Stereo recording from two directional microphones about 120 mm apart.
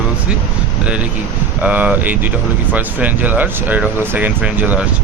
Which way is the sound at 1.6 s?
10° right (ahead or behind).